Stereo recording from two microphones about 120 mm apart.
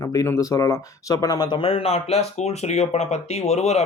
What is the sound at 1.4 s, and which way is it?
Speech, 50° left (ahead or behind).